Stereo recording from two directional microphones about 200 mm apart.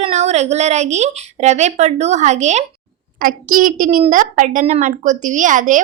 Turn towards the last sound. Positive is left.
turn(degrees=-40)  # may be behind; listen again after turning